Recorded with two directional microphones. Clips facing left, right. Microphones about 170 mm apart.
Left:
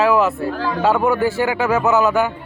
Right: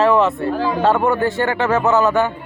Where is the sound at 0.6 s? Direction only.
20° right (ahead or behind).